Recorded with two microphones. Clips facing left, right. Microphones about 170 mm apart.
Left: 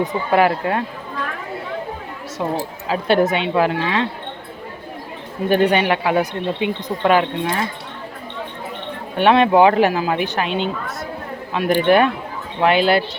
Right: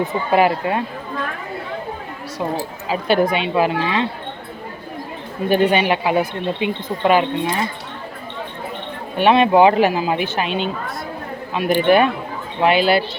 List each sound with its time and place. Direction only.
0.0 s speech: 5° right (ahead or behind)
2.4 s speech: 10° right (ahead or behind)
5.5 s speech: 15° right (ahead or behind)
9.1 s speech: 15° right (ahead or behind)